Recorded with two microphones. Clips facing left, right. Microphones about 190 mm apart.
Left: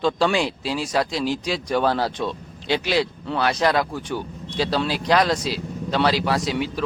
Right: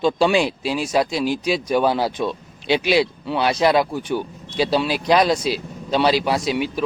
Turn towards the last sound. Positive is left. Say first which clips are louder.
# right 2 dB
turn(degrees=-15)  # may be behind; listen again after turning